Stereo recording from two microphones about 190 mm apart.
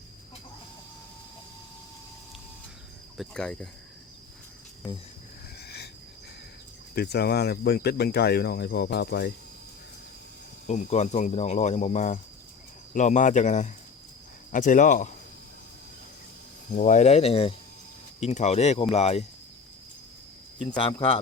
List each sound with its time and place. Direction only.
3.2 s cricket: 5° left (ahead or behind)
5.5 s a sound: 60° left (ahead or behind)
6.9 s speech: 55° left (ahead or behind)
10.7 s speech: 35° left (ahead or behind)
16.7 s speech: 40° left (ahead or behind)
20.7 s speech: 25° left (ahead or behind)